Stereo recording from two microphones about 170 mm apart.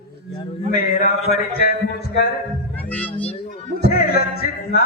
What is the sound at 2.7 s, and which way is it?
Music, 10° left (ahead or behind).